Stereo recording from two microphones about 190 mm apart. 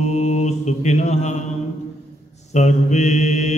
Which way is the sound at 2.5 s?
35° left (ahead or behind).